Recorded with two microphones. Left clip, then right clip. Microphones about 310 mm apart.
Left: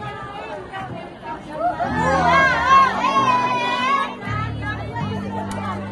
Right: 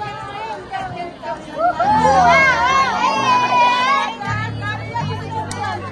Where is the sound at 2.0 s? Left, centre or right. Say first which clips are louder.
Right 3 dB; centre.